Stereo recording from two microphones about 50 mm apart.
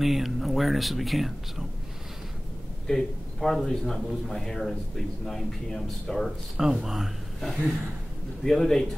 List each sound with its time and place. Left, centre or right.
0.0 s speech: centre
2.9 s speech: centre
6.5 s speech: centre
7.3 s speech: centre